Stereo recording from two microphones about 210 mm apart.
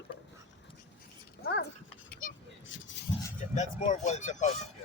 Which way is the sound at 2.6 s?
60° left (ahead or behind).